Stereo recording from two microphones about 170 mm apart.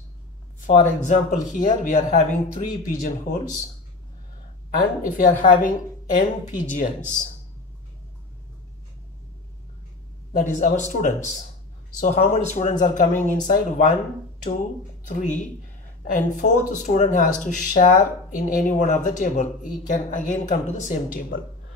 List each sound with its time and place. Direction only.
1.0 s speech: 50° left (ahead or behind)
4.6 s speech: 50° left (ahead or behind)
10.3 s speech: 45° left (ahead or behind)
15.0 s speech: 45° left (ahead or behind)